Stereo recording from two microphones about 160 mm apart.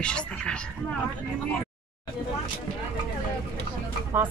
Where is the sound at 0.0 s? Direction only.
5° left (ahead or behind).